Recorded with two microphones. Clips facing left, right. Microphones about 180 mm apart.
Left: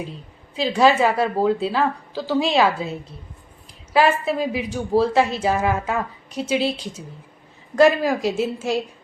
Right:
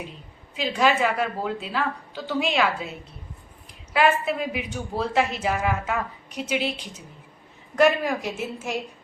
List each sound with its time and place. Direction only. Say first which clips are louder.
0.5 s a woman's voice: left 5 dB; 35° left (ahead or behind)
3.9 s a woman's voice: left 3 dB; 35° left (ahead or behind)
7.8 s a woman's voice: left 4 dB; 30° left (ahead or behind)
8.2 s a woman's voice: left 8 dB; 90° left